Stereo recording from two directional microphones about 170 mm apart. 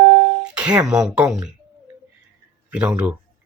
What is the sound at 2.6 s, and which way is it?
Speech, 5° right (ahead or behind).